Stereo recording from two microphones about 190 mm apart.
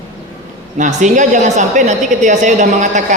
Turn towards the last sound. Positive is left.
turn(degrees=-40)  # may be behind; listen again after turning